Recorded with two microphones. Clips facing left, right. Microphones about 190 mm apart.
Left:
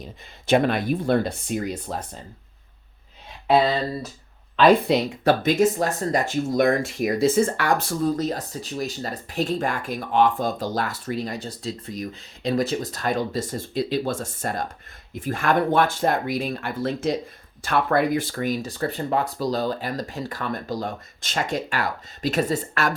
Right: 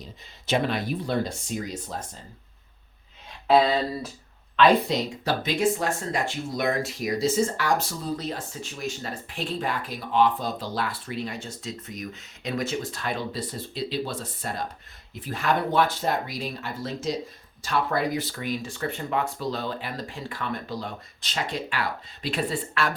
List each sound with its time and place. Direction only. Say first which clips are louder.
0.0 s speech: left 4 dB; 50° left (ahead or behind)
3.4 s a sound: left 1 dB; centre (ahead or behind)
4.9 s speech: left 7 dB; 60° left (ahead or behind); by 23.0 s 45° left (ahead or behind)